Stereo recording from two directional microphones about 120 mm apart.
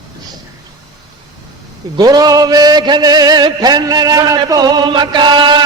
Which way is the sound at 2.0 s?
30° right (ahead or behind).